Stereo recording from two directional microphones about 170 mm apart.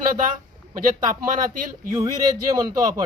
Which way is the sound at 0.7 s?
20° right (ahead or behind).